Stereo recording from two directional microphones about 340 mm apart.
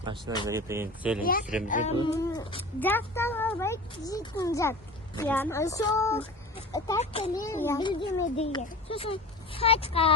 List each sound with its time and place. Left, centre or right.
0.0 s speech: centre
1.2 s a child's voice: left